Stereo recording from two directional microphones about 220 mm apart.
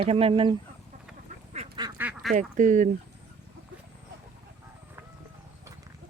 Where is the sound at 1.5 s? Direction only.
25° right (ahead or behind).